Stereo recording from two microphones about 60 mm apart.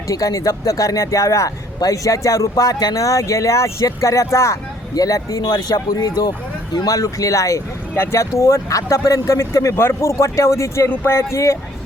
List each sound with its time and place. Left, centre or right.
0.1 s speech: left
4.9 s speech: left
6.8 s speech: left
7.9 s speech: left
8.4 s speech: left
9.7 s speech: left
10.8 s speech: left